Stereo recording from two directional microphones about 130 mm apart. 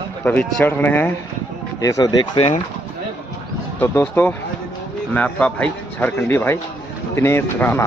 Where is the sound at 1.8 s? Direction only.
25° left (ahead or behind).